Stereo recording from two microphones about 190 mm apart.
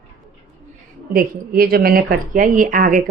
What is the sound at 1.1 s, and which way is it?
A woman's voice, 50° right (ahead or behind).